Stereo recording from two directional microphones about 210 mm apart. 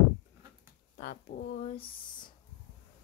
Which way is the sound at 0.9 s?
40° left (ahead or behind).